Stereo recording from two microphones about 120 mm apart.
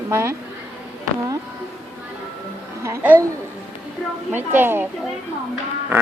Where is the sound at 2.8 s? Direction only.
20° right (ahead or behind).